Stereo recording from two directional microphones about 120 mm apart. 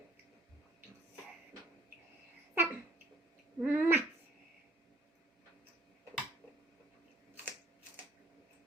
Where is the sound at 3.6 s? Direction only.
15° right (ahead or behind).